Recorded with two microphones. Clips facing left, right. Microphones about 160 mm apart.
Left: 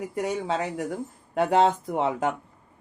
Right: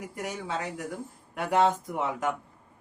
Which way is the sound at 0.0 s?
25° left (ahead or behind).